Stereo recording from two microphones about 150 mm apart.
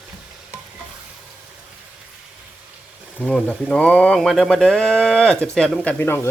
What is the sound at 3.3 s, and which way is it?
Speech, 5° left (ahead or behind).